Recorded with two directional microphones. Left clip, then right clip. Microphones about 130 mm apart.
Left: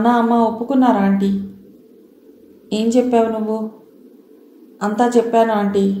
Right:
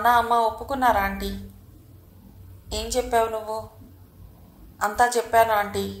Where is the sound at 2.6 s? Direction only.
40° right (ahead or behind).